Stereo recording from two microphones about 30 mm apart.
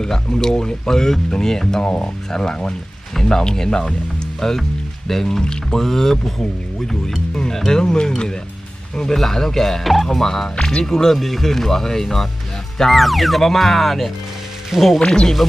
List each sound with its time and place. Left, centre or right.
0.0 s speech: left
1.8 s speech: left
2.3 s speech: left
5.4 s speech: left
5.8 s speech: centre
9.1 s speech: centre
10.7 s speech: centre
11.2 s speech: centre
12.9 s speech: centre
14.9 s speech: left